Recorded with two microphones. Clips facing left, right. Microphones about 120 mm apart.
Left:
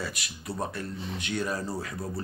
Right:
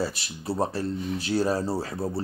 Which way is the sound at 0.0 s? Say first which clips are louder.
Right 7 dB; 30° right (ahead or behind).